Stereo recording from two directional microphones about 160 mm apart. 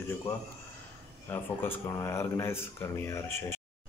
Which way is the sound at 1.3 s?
15° left (ahead or behind).